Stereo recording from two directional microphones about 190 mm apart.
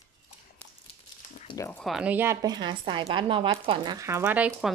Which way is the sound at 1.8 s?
Centre (ahead or behind).